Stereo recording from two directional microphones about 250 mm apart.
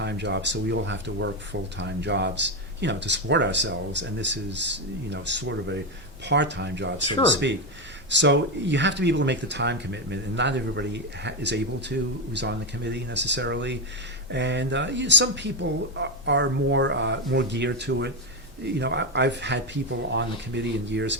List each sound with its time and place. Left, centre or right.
0.0 s speech: right